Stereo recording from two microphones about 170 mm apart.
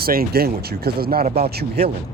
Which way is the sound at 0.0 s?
60° right (ahead or behind).